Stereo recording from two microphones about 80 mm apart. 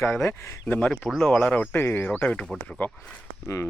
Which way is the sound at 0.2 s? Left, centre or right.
Left.